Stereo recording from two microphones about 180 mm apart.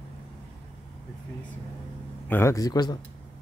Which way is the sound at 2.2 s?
15° left (ahead or behind).